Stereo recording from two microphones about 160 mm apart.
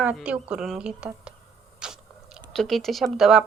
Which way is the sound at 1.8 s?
5° right (ahead or behind).